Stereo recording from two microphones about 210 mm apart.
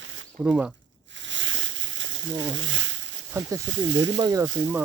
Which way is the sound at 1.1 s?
60° right (ahead or behind).